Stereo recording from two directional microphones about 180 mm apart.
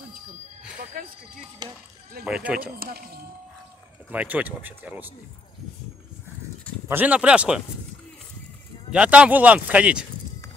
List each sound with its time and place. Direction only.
1.0 s speech: 50° right (ahead or behind)
1.6 s speech: 20° right (ahead or behind)
2.2 s speech: 5° right (ahead or behind)
4.1 s speech: 10° right (ahead or behind)
6.9 s speech: 10° right (ahead or behind)
8.9 s speech: 5° right (ahead or behind)